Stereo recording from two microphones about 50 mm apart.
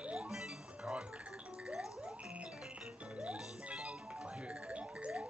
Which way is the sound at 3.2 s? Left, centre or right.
Centre.